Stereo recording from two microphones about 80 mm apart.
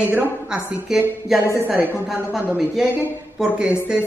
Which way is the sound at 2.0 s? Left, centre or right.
Centre.